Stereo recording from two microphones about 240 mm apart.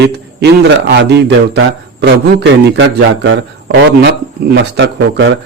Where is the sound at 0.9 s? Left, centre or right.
Right.